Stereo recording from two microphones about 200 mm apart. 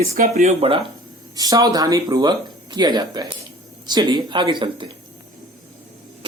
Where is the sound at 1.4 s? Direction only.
20° right (ahead or behind).